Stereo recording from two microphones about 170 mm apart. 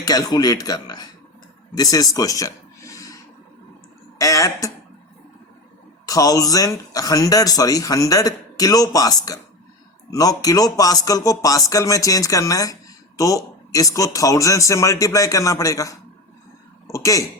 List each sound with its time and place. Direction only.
0.0 s a man's voice: 25° left (ahead or behind)
4.2 s a man's voice: 20° left (ahead or behind)
6.1 s a man's voice: 20° left (ahead or behind)
16.8 s a sound: 20° left (ahead or behind)